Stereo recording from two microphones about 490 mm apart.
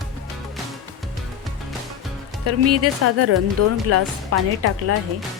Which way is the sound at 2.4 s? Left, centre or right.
Right.